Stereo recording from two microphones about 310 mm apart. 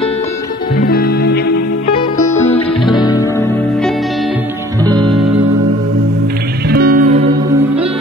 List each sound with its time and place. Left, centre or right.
0.7 s music: left
2.0 s music: centre
4.8 s music: centre
6.7 s music: right